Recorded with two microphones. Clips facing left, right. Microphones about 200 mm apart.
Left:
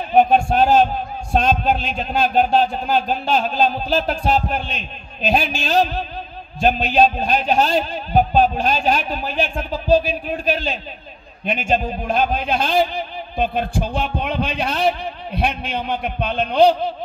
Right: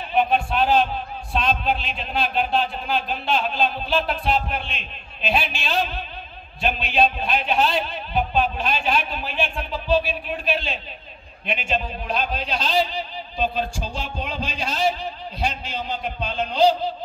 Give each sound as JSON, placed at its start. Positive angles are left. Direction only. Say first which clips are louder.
{"t": 0.1, "sound": "a man's voice", "louder": "left 6 dB", "side_deg": 45}